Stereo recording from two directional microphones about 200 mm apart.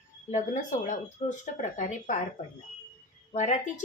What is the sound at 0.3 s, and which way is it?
A woman's voice, 40° left (ahead or behind).